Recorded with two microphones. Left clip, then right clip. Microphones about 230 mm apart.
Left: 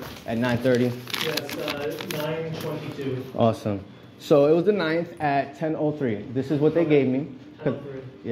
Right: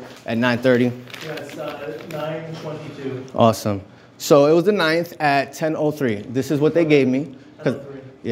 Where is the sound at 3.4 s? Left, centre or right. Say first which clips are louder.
Right 7 dB; right.